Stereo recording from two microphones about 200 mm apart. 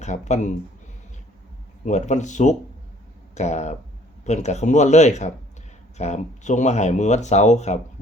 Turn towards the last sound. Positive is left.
turn(degrees=35)  # may be behind; listen again after turning